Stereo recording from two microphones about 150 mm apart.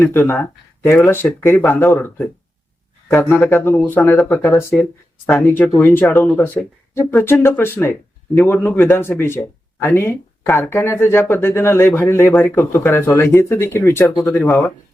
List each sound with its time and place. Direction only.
0.0 s speech: 20° left (ahead or behind)